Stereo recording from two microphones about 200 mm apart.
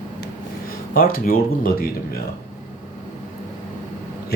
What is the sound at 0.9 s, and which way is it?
Speech, 45° left (ahead or behind).